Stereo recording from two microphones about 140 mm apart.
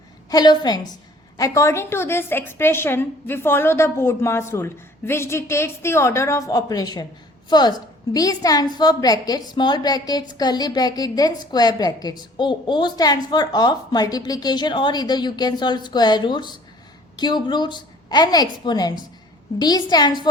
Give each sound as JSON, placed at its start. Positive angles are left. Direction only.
{"t": 0.3, "sound": "a woman's voice", "side_deg": 30}